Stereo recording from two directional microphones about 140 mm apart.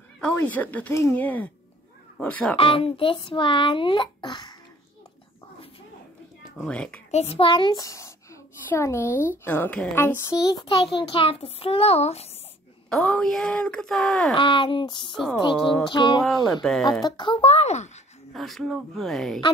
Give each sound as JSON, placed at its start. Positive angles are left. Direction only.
{"t": 0.2, "sound": "speech", "side_deg": 10}
{"t": 2.5, "sound": "a child's voice", "side_deg": 40}
{"t": 6.6, "sound": "speech", "side_deg": 10}
{"t": 7.1, "sound": "a child's voice", "side_deg": 50}
{"t": 12.9, "sound": "speech", "side_deg": 5}
{"t": 14.3, "sound": "a child's voice", "side_deg": 35}
{"t": 15.5, "sound": "speech", "side_deg": 0}
{"t": 15.9, "sound": "a child's voice", "side_deg": 35}
{"t": 16.6, "sound": "speech", "side_deg": 5}
{"t": 17.0, "sound": "speech", "side_deg": 35}
{"t": 18.3, "sound": "speech", "side_deg": 0}